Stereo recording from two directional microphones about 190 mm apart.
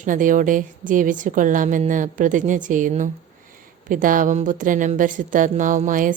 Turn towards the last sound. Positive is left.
turn(degrees=-45)  # may be behind; listen again after turning